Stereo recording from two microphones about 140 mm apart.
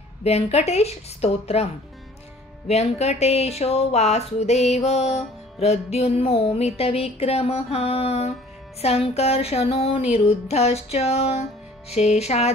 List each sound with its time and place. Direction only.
0.2 s speech: 50° left (ahead or behind)
2.7 s speech: 50° left (ahead or behind)